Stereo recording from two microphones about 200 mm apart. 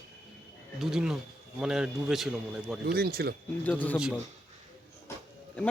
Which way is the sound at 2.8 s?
50° right (ahead or behind).